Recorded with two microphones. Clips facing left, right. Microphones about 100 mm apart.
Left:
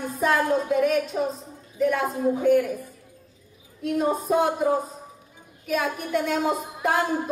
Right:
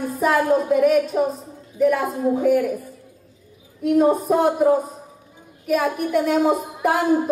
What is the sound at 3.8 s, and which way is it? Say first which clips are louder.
A woman's voice: right 7 dB; 5° right (ahead or behind).